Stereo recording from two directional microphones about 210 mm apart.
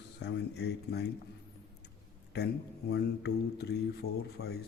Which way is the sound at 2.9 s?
50° left (ahead or behind).